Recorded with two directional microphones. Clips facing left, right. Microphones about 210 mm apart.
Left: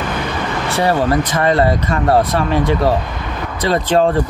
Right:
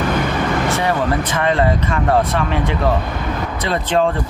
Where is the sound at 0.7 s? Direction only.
35° left (ahead or behind).